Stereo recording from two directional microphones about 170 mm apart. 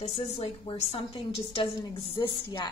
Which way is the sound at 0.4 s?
30° left (ahead or behind).